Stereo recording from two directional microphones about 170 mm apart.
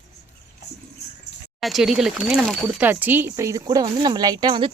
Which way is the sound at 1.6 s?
Centre (ahead or behind).